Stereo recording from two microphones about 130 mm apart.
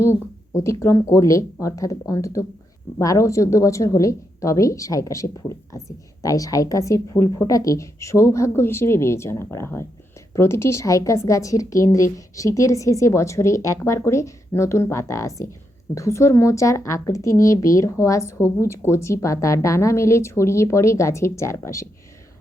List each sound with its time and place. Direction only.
0.0 s a woman's voice: 20° left (ahead or behind)